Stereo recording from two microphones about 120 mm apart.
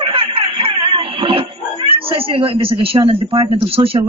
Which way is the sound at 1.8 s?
50° right (ahead or behind).